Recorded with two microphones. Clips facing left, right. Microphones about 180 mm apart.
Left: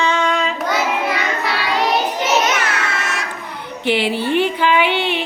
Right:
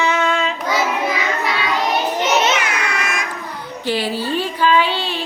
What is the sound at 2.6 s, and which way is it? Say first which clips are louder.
Music: even; 10° right (ahead or behind).